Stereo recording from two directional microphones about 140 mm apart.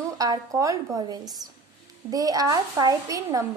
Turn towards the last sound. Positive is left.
turn(degrees=-25)  # may be behind; listen again after turning